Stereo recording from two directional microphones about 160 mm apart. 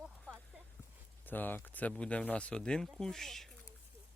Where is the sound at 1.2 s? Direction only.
10° left (ahead or behind).